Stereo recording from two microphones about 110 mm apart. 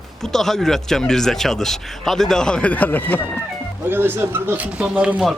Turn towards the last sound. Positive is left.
turn(degrees=-10)  # may be behind; listen again after turning